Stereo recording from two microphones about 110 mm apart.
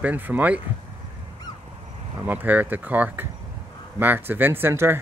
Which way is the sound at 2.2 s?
15° right (ahead or behind).